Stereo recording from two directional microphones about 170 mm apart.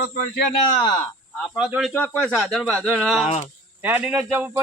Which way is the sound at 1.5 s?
Centre (ahead or behind).